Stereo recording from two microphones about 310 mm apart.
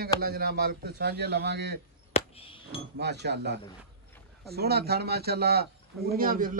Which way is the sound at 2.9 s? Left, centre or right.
Right.